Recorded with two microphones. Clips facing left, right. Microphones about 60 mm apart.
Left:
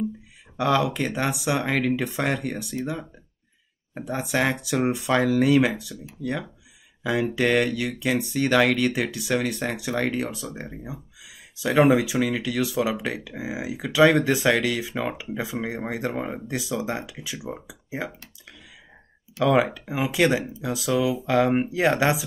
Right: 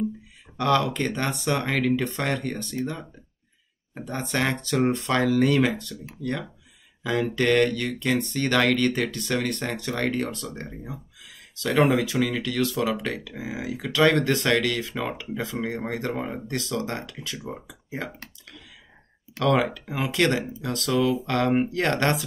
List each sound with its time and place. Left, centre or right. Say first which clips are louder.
0.6 s speech: even; centre
7.0 s speech: left 1 dB; centre
19.3 s speech: left 2 dB; centre